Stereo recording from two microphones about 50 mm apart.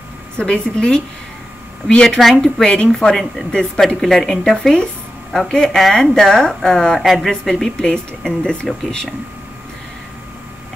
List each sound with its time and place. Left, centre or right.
0.4 s a woman's voice: centre
7.7 s speech: centre